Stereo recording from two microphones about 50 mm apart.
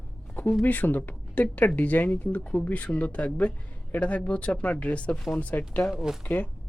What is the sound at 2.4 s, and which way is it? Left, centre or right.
Speech, left.